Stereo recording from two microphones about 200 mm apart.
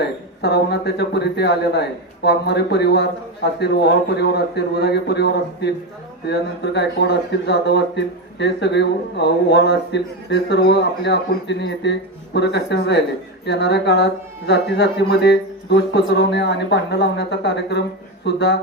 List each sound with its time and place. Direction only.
0.4 s speech: 55° left (ahead or behind)
6.7 s speech: 60° left (ahead or behind)